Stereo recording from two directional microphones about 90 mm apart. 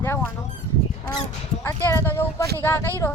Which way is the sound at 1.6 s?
30° left (ahead or behind).